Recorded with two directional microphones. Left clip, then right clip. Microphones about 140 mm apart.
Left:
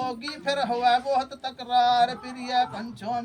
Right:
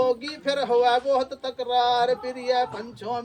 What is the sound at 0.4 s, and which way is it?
Speech, 35° right (ahead or behind).